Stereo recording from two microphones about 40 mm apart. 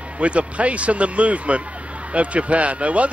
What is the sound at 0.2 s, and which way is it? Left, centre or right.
Speech, right.